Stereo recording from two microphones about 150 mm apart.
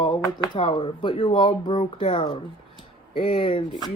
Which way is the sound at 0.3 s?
30° left (ahead or behind).